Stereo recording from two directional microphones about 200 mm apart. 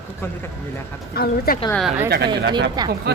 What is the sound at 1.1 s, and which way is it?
Speech, 50° left (ahead or behind).